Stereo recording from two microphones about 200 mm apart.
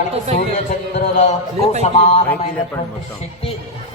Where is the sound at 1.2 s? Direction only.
35° left (ahead or behind).